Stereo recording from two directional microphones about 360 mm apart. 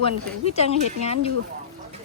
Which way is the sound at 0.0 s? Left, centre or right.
Centre.